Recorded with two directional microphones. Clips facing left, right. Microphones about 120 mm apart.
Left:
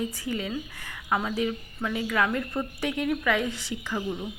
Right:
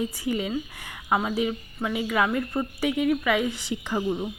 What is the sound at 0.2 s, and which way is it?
Speech, 15° right (ahead or behind).